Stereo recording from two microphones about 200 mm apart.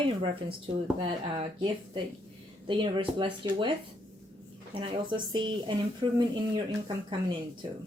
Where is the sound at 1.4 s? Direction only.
25° right (ahead or behind).